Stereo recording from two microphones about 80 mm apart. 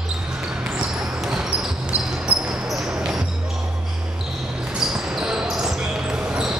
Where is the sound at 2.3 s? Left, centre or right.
Centre.